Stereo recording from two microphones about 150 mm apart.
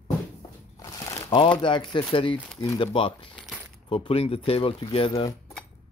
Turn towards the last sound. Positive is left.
turn(degrees=40)  # may be behind; listen again after turning